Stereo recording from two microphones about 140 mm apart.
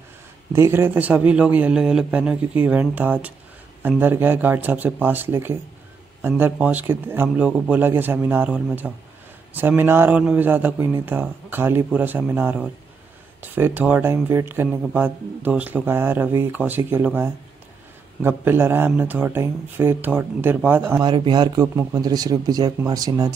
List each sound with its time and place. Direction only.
0.5 s speech: 20° right (ahead or behind)
21.0 s speech: 35° right (ahead or behind)